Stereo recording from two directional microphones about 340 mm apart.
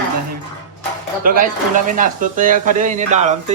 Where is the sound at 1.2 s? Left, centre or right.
Right.